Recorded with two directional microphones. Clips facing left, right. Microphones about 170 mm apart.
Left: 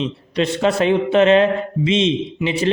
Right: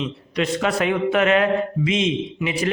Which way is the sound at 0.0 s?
30° left (ahead or behind).